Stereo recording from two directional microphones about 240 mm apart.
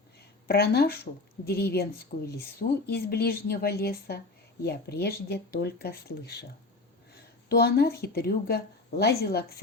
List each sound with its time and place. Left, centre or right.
0.2 s a sound: left
1.5 s a woman's voice: left
7.5 s a woman's voice: left